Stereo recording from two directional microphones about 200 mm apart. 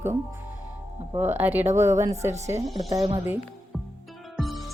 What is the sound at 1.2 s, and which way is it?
Speech, 10° right (ahead or behind).